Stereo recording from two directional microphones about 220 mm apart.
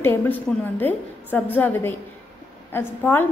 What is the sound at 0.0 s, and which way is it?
A woman's voice, 10° left (ahead or behind).